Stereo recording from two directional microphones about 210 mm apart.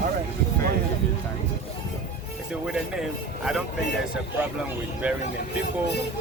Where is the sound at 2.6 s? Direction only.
5° right (ahead or behind).